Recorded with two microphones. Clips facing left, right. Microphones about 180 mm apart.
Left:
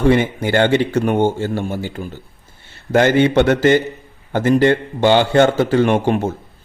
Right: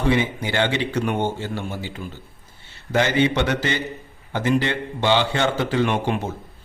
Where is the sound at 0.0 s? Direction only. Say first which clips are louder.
Left 6 dB; 50° left (ahead or behind).